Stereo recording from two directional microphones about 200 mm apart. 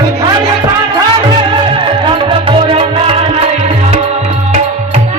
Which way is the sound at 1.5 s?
25° right (ahead or behind).